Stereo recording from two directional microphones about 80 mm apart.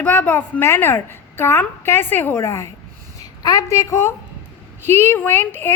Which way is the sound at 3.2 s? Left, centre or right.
Left.